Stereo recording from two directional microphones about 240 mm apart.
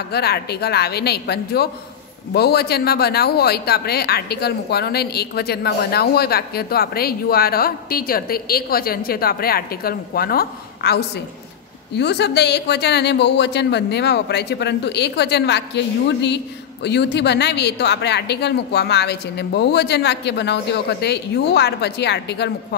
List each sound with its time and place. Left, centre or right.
0.1 s a woman's voice: left